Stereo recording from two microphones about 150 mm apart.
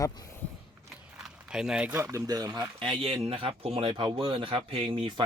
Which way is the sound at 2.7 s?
35° right (ahead or behind).